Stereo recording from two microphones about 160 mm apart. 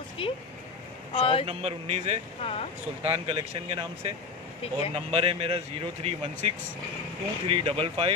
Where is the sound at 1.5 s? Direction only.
40° right (ahead or behind).